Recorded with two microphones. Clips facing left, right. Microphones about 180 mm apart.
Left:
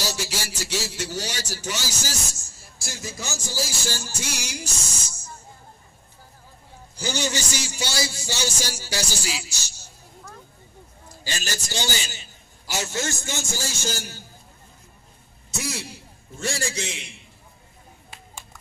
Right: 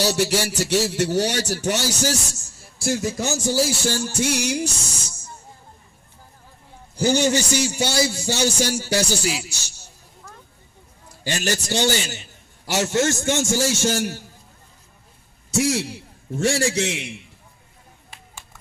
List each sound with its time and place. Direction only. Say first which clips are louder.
0.0 s a man's voice: right 10 dB; 65° right (ahead or behind)
7.0 s a man's voice: right 9 dB; 55° right (ahead or behind)
11.2 s a man's voice: right 8 dB; 60° right (ahead or behind)
15.5 s a man's voice: right 11 dB; 75° right (ahead or behind)